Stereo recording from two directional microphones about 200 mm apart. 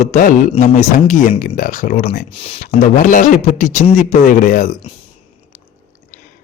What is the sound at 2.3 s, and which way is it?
Speech, 30° left (ahead or behind).